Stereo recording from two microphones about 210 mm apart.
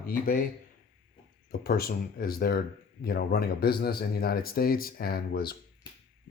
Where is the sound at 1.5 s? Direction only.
45° left (ahead or behind).